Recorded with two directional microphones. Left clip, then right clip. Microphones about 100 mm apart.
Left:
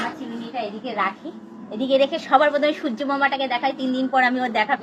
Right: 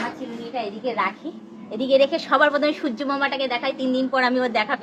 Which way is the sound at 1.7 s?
35° right (ahead or behind).